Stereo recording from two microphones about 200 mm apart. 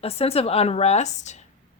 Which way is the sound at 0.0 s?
30° left (ahead or behind).